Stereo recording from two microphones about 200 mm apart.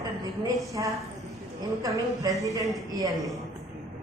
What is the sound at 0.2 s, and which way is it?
Speech, 20° right (ahead or behind).